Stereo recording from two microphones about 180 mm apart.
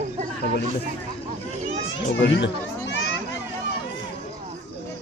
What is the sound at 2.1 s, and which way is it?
Children playing, 90° left.